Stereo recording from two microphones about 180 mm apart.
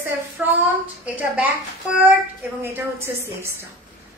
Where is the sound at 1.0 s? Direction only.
10° right (ahead or behind).